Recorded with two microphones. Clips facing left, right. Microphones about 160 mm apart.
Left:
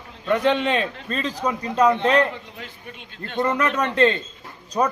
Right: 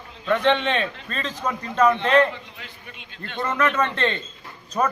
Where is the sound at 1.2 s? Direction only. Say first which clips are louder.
Left 2 dB; 10° left (ahead or behind).